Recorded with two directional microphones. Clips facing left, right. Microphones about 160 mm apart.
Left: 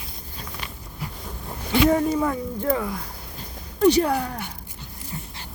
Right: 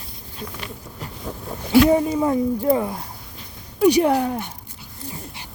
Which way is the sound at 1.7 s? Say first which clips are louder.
Right 4 dB; 10° right (ahead or behind).